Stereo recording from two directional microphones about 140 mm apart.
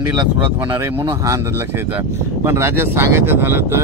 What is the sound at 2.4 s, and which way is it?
Speech, 15° right (ahead or behind).